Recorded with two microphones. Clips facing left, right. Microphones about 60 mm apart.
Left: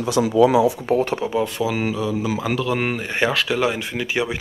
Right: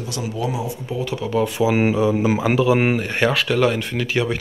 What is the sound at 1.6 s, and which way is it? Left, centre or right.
Speech, right.